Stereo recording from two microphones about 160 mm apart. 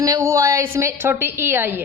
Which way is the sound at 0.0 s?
20° right (ahead or behind).